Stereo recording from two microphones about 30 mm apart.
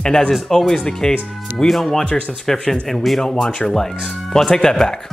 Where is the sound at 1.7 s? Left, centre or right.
Centre.